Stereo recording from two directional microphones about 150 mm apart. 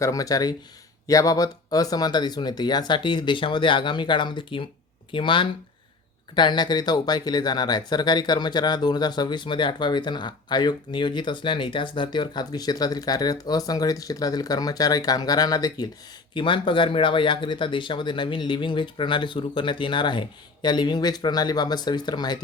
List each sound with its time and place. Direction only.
0.0 s speech: 25° left (ahead or behind)